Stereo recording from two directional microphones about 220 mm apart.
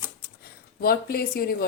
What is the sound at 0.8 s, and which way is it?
Speech, 45° left (ahead or behind).